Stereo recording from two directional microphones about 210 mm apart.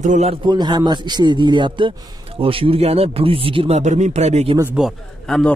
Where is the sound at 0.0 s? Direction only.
35° right (ahead or behind).